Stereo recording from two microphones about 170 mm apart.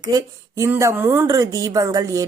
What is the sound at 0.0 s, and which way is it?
A woman's voice, 20° right (ahead or behind).